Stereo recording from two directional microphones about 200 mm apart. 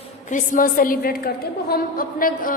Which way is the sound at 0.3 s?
40° left (ahead or behind).